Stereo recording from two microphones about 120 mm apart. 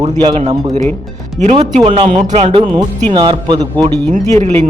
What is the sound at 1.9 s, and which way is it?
A man's voice, 45° right (ahead or behind).